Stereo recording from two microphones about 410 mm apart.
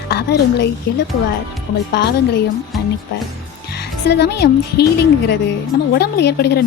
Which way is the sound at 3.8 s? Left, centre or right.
Left.